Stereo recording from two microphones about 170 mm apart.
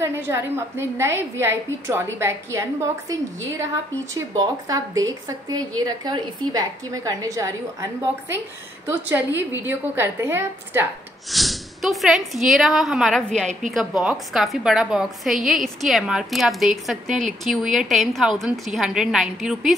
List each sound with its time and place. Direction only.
0.0 s a woman's voice: 15° right (ahead or behind)
11.2 s a woman's voice: centre (ahead or behind)